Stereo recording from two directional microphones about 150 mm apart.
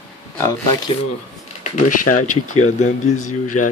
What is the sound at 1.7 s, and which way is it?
Speech, 55° left (ahead or behind).